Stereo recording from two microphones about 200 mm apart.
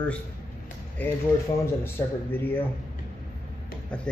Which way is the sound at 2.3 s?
10° left (ahead or behind).